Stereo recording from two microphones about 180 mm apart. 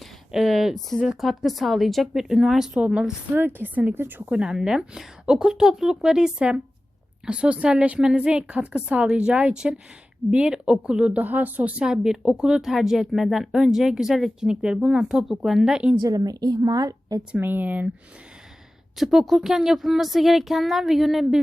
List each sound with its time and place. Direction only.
0.3 s speech: centre (ahead or behind)
16.0 s a woman's voice: 20° right (ahead or behind)
17.3 s speech: 10° right (ahead or behind)
18.9 s speech: centre (ahead or behind)